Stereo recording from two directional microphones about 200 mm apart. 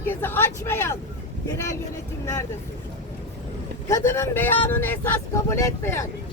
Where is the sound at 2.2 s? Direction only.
15° left (ahead or behind).